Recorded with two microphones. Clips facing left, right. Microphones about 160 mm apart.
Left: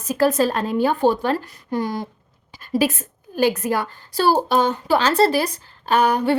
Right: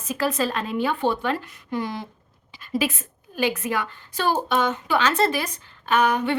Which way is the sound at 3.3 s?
40° left (ahead or behind).